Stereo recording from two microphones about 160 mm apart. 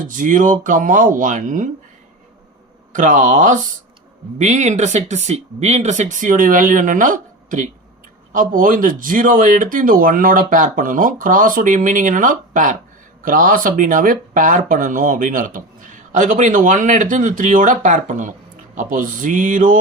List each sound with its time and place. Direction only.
0.0 s speech: 55° right (ahead or behind)
2.9 s speech: 55° right (ahead or behind)